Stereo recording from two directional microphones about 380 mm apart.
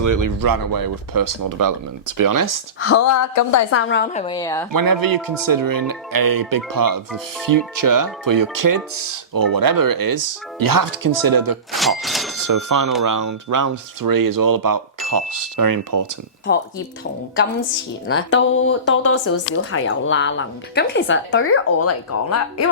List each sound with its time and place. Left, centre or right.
0.0 s speech: right
2.8 s a woman's voice: left
3.8 s a woman's voice: left; by 4.6 s centre
4.7 s speech: right
11.7 s a sound: centre
12.4 s speech: right
18.1 s speech: left